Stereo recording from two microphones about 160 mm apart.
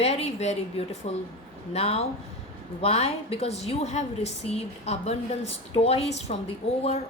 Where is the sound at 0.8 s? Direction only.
40° left (ahead or behind).